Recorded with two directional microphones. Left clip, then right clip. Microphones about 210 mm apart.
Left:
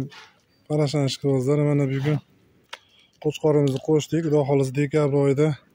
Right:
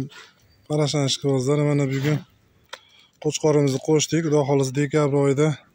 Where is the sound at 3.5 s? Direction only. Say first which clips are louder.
Right 1 dB; 10° right (ahead or behind).